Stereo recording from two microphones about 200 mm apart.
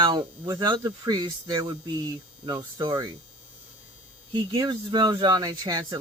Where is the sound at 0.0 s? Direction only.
20° right (ahead or behind).